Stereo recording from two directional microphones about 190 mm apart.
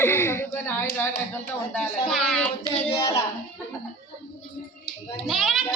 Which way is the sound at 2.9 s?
30° left (ahead or behind).